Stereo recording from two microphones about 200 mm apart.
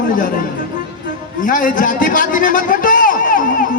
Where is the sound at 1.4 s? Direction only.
45° left (ahead or behind).